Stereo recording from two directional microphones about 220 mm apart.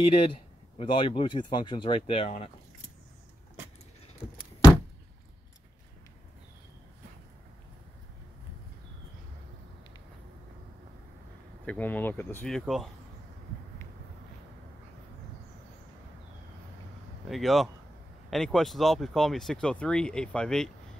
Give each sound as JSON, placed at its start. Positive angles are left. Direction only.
{"t": 0.1, "sound": "speech", "side_deg": 25}
{"t": 11.6, "sound": "speech", "side_deg": 5}
{"t": 17.3, "sound": "speech", "side_deg": 0}